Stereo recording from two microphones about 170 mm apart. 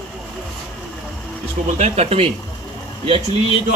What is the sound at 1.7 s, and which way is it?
Speech, 40° right (ahead or behind).